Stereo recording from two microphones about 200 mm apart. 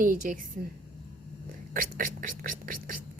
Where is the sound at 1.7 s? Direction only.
45° right (ahead or behind).